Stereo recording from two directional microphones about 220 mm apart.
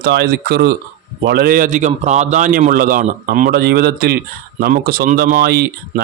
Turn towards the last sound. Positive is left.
turn(degrees=-45)  # may be behind; listen again after turning